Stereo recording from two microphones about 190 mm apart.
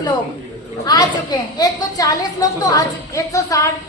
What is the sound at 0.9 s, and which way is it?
A woman's voice, 20° left (ahead or behind).